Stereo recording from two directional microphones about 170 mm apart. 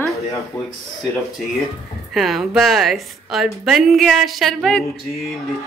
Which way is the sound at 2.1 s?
Centre (ahead or behind).